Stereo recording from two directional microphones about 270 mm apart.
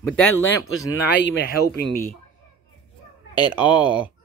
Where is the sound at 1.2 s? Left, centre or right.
Left.